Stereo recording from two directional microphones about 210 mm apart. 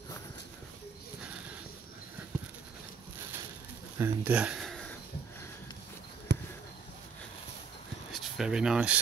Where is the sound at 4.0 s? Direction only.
5° right (ahead or behind).